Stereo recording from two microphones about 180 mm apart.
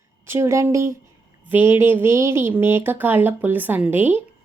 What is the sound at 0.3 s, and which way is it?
A woman's voice, 15° right (ahead or behind).